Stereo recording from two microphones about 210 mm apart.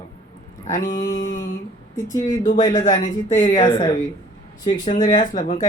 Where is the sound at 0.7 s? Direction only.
40° left (ahead or behind).